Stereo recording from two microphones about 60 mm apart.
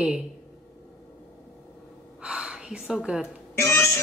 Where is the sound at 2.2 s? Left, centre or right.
Centre.